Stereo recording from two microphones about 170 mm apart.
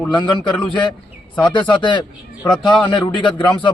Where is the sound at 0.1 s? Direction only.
25° left (ahead or behind).